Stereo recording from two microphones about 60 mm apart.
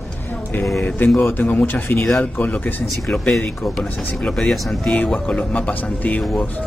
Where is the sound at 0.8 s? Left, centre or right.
Left.